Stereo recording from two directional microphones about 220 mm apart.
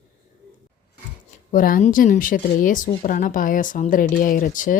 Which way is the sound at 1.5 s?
40° left (ahead or behind).